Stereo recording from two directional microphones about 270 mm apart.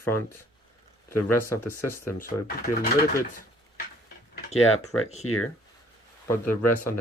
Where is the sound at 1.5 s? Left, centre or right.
Centre.